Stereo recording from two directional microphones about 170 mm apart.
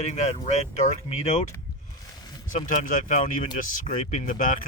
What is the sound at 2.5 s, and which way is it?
Speech, 50° left (ahead or behind).